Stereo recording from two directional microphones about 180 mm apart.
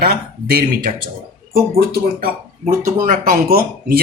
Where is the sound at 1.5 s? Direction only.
55° right (ahead or behind).